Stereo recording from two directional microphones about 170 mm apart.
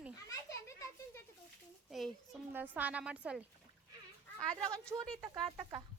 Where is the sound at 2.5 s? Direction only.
10° right (ahead or behind).